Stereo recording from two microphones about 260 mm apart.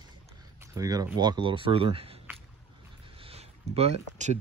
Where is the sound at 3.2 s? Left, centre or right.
Right.